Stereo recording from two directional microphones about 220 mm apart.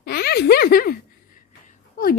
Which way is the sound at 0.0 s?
45° left (ahead or behind).